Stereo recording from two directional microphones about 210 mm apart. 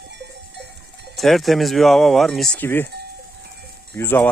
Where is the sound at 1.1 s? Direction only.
Centre (ahead or behind).